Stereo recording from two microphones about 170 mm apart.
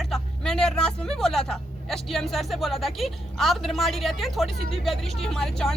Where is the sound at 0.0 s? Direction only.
5° left (ahead or behind).